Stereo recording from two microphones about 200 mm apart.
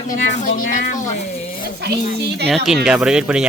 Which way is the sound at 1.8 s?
55° right (ahead or behind).